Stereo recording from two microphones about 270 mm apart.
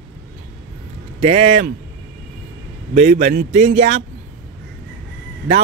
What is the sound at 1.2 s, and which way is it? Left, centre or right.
Speech, right.